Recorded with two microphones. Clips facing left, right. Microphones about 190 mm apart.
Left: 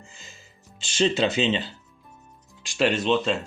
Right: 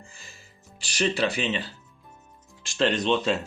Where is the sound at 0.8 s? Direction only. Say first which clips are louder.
Left 3 dB; 25° left (ahead or behind).